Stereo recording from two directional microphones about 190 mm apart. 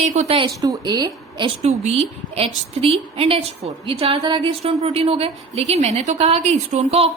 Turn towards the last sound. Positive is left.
turn(degrees=-35)  # may be behind; listen again after turning